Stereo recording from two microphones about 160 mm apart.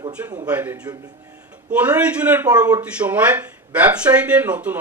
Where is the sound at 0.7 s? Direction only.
25° right (ahead or behind).